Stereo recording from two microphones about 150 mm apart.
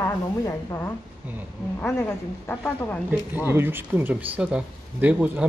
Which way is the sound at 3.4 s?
15° right (ahead or behind).